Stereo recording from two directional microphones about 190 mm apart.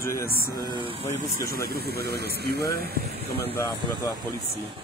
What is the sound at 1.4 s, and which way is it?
Speech, 55° right (ahead or behind).